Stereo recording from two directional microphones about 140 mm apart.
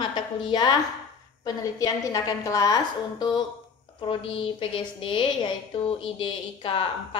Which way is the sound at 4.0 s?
40° left (ahead or behind).